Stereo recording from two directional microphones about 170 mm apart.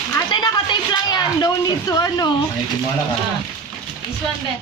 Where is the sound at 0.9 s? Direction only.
20° left (ahead or behind).